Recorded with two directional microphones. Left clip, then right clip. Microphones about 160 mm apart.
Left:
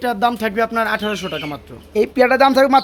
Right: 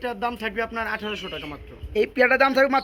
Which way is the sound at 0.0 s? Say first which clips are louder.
Left 9 dB; 55° left (ahead or behind).